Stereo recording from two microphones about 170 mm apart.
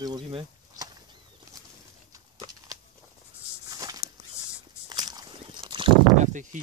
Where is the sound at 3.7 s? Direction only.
20° right (ahead or behind).